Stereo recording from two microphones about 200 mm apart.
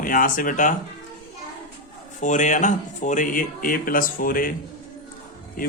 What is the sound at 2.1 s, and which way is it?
Speech, 35° left (ahead or behind).